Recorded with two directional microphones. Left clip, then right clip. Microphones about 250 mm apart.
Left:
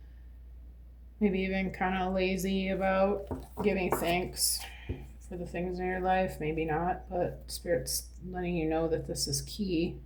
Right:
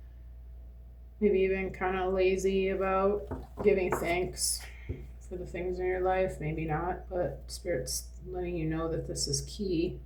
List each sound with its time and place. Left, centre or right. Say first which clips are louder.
1.2 s speech: right 4 dB; left